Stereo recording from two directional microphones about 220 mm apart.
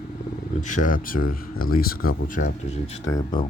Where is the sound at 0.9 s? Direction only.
40° left (ahead or behind).